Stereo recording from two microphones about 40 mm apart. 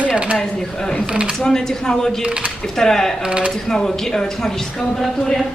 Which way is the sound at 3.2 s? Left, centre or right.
Right.